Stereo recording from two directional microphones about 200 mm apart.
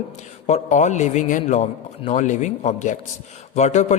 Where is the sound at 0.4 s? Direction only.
35° left (ahead or behind).